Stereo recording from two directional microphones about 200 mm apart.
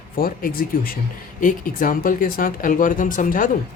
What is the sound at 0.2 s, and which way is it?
Speech, 45° left (ahead or behind).